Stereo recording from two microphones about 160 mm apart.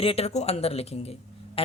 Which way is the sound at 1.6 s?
35° left (ahead or behind).